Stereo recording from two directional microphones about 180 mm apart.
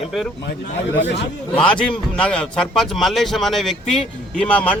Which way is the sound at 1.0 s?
70° left (ahead or behind).